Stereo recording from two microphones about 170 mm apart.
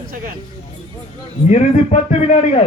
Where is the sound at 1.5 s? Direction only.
40° left (ahead or behind).